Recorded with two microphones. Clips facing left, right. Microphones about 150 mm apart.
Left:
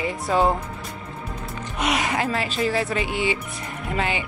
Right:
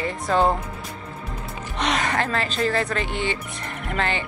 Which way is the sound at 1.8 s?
10° left (ahead or behind).